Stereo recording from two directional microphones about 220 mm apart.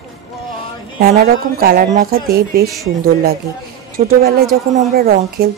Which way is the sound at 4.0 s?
40° right (ahead or behind).